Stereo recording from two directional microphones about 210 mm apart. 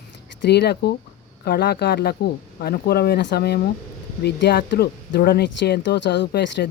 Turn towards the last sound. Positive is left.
turn(degrees=55)  # may be behind; listen again after turning